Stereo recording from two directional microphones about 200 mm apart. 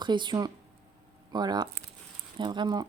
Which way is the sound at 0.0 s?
25° right (ahead or behind).